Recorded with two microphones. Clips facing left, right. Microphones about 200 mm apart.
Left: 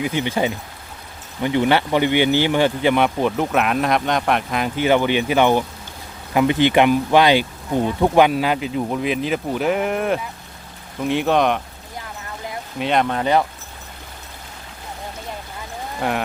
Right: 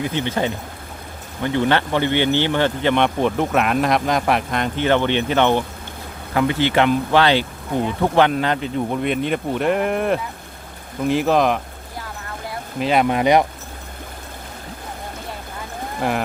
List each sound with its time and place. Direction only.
0.0 s speech: 10° left (ahead or behind)
12.8 s speech: 5° right (ahead or behind)
16.0 s cattle: centre (ahead or behind)